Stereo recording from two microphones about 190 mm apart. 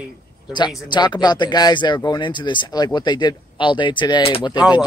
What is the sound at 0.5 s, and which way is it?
Speech, 25° left (ahead or behind).